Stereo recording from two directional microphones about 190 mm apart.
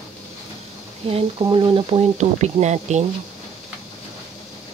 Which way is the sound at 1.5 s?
30° right (ahead or behind).